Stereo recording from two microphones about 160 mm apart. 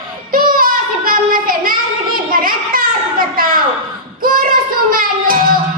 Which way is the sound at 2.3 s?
60° right (ahead or behind).